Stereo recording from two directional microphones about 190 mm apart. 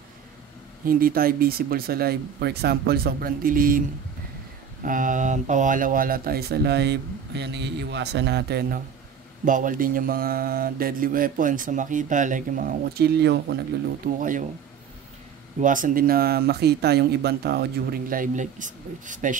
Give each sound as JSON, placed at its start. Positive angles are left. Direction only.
{"t": 0.8, "sound": "mantra", "side_deg": -50}
{"t": 4.8, "sound": "speech", "side_deg": -45}
{"t": 9.4, "sound": "mantra", "side_deg": -45}
{"t": 14.0, "sound": "mantra", "side_deg": -45}
{"t": 15.6, "sound": "mantra", "side_deg": -45}